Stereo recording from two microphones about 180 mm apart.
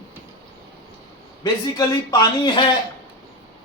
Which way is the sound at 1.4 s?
25° left (ahead or behind).